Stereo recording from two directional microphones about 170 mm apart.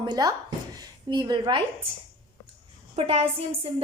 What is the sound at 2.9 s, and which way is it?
Speech, 35° right (ahead or behind).